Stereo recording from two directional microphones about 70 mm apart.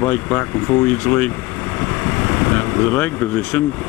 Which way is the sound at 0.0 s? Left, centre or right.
Left.